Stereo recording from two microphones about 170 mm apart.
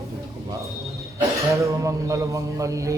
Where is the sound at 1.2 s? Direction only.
15° right (ahead or behind).